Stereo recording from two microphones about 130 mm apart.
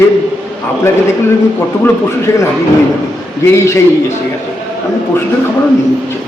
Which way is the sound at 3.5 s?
20° left (ahead or behind).